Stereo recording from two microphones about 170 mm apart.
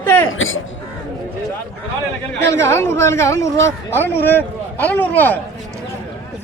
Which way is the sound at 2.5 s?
15° left (ahead or behind).